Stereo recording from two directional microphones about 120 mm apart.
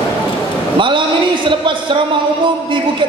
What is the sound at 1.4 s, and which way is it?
Speech, 40° right (ahead or behind).